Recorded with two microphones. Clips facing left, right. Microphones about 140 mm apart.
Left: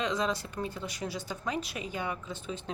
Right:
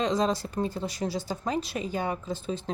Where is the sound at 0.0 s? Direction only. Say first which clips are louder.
Right 5 dB; 35° right (ahead or behind).